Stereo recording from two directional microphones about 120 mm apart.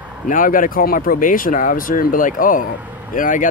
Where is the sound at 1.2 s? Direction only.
90° left.